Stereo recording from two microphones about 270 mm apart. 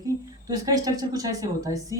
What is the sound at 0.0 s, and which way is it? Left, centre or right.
Speech, centre.